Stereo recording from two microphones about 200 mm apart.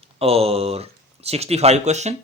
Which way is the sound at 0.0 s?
30° right (ahead or behind).